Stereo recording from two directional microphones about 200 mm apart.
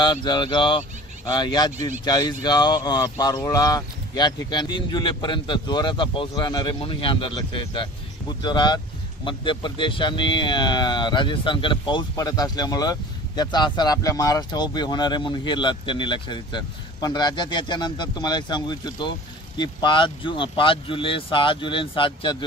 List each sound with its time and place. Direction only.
0.0 s speech: 20° left (ahead or behind)